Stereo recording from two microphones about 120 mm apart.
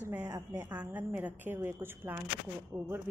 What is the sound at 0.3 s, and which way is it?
A woman's voice, 25° right (ahead or behind).